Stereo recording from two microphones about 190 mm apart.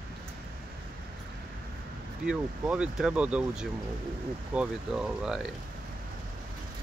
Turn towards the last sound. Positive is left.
turn(degrees=-5)  # may be behind; listen again after turning